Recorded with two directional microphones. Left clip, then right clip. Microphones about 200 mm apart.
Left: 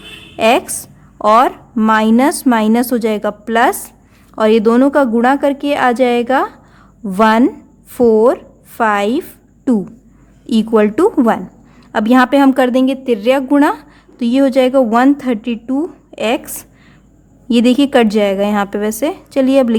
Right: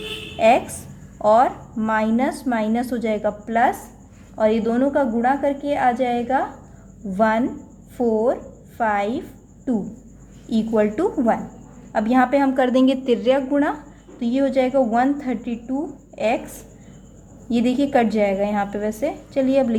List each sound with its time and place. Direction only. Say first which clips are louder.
0.3 s a woman's voice: left 4 dB; 40° left (ahead or behind)
10.7 s a woman's voice: left 8 dB; 45° left (ahead or behind)
13.5 s a woman's voice: left 9 dB; 40° left (ahead or behind)
17.5 s a woman's voice: left 8 dB; 40° left (ahead or behind)